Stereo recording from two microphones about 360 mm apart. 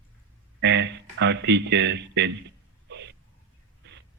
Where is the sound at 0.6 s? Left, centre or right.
Right.